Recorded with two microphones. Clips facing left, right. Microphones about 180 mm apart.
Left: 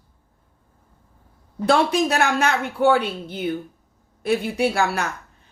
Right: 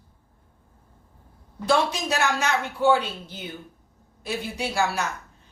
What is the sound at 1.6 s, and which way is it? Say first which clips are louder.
A woman's voice: left 5 dB; 60° left (ahead or behind).